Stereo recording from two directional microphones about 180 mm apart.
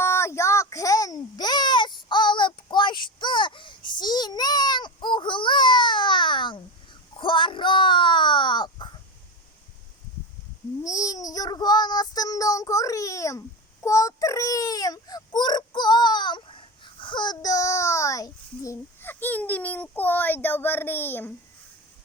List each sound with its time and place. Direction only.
0.0 s a sound: 15° left (ahead or behind)
10.8 s child singing: 20° left (ahead or behind)
13.8 s baby cry: 20° left (ahead or behind)